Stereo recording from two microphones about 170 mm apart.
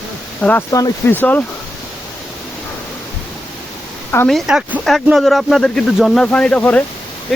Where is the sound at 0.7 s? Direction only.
20° left (ahead or behind).